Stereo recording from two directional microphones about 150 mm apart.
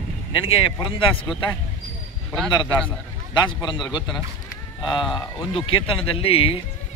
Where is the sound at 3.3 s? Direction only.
30° left (ahead or behind).